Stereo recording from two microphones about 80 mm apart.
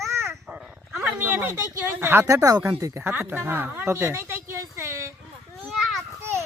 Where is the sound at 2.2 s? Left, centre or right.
Right.